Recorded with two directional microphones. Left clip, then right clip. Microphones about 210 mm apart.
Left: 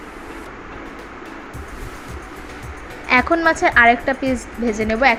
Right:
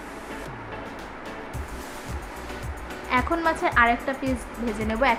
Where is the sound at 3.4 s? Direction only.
20° left (ahead or behind).